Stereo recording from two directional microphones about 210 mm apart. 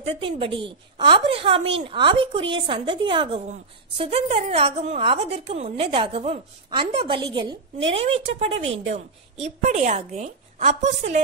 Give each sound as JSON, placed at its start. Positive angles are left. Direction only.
{"t": 0.0, "sound": "a woman's voice", "side_deg": -25}